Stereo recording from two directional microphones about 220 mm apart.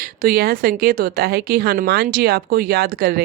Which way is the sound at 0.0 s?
40° right (ahead or behind).